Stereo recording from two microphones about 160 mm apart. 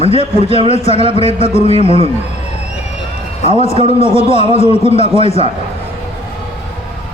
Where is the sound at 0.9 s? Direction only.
35° right (ahead or behind).